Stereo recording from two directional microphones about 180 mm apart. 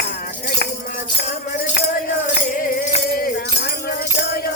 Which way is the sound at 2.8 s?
55° left (ahead or behind).